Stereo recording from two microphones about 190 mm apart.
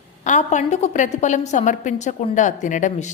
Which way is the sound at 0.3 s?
40° left (ahead or behind).